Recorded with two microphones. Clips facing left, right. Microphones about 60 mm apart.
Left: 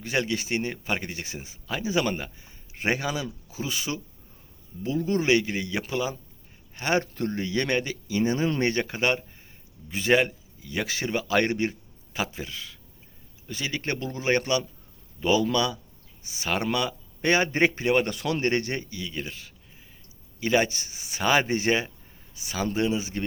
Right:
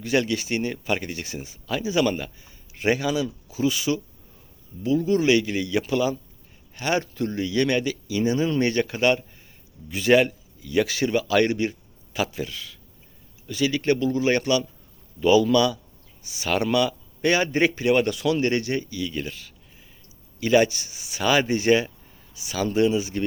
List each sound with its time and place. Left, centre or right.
0.0 s speech: left
19.0 s speech: centre